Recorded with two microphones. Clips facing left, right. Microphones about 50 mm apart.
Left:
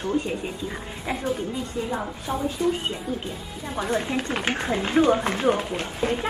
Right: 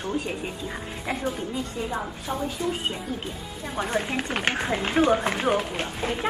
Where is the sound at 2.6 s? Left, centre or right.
Centre.